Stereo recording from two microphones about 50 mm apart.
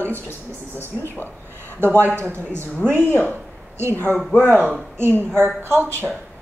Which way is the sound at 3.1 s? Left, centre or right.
Left.